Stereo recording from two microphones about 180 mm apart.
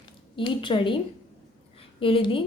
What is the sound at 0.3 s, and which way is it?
A woman's voice, 30° left (ahead or behind).